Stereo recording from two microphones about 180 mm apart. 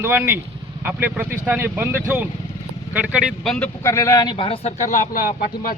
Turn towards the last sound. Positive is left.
turn(degrees=55)  # may be behind; listen again after turning